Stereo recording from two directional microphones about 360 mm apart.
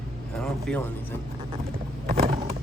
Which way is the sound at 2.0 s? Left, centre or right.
Right.